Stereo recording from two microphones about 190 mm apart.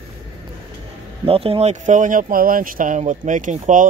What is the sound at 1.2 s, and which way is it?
Speech, 30° right (ahead or behind).